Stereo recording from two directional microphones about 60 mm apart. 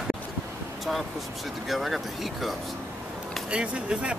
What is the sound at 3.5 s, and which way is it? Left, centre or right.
Speech, centre.